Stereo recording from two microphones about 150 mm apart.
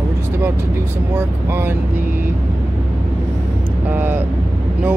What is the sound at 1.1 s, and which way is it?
Speech, 15° right (ahead or behind).